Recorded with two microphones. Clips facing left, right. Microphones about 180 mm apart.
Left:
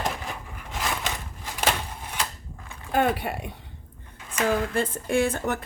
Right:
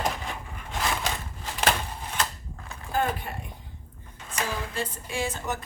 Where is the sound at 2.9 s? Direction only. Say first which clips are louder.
Left 4 dB; 75° left (ahead or behind).